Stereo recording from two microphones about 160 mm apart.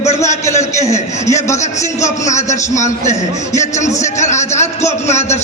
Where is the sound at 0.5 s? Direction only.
45° left (ahead or behind).